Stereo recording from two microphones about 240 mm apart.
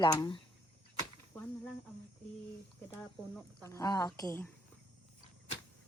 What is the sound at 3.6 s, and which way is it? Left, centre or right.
Speech, centre.